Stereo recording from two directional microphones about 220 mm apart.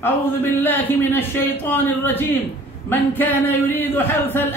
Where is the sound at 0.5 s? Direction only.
10° left (ahead or behind).